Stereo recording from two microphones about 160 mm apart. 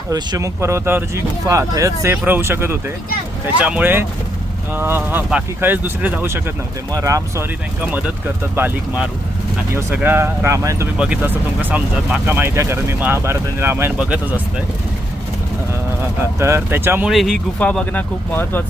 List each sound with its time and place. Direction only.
0.1 s speech: 20° right (ahead or behind)
10.9 s speech: 5° right (ahead or behind)
16.4 s speech: 15° right (ahead or behind)
17.1 s speech: centre (ahead or behind)